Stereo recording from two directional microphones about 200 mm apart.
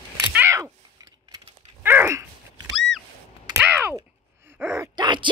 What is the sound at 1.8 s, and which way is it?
Dog, 10° right (ahead or behind).